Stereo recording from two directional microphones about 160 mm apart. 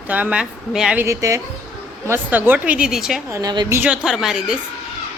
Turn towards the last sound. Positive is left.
turn(degrees=-5)  # may be behind; listen again after turning